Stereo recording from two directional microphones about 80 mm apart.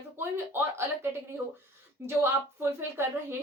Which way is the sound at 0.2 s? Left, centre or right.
Right.